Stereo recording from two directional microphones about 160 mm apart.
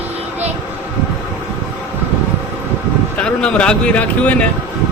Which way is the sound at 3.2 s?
5° left (ahead or behind).